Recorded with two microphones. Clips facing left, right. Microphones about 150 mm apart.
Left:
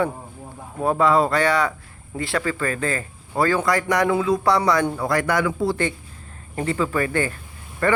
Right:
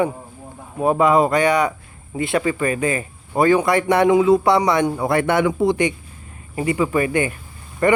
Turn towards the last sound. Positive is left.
turn(degrees=-15)  # may be behind; listen again after turning